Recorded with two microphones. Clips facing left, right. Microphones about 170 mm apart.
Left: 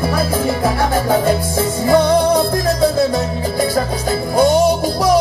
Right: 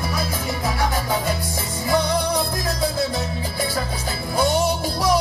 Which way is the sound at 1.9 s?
50° left (ahead or behind).